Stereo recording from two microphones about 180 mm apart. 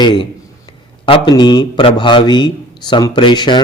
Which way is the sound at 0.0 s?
25° left (ahead or behind).